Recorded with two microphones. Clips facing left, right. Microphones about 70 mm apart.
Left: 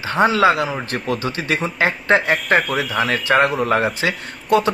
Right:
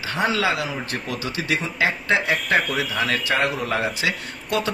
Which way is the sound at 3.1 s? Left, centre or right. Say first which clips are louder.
Left 8 dB; left.